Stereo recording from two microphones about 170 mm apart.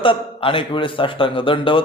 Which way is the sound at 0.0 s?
30° left (ahead or behind).